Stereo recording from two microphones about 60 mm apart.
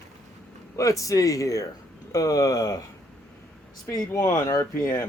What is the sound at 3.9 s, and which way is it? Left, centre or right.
Speech, left.